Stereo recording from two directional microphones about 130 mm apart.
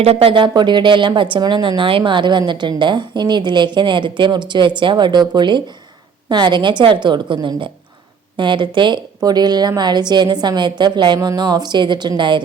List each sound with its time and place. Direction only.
0.0 s a woman's voice: 50° right (ahead or behind)